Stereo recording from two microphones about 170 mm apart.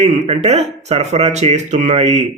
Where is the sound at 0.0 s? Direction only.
40° right (ahead or behind).